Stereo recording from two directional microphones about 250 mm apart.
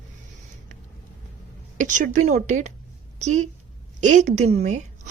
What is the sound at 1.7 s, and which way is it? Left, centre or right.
A woman's voice, right.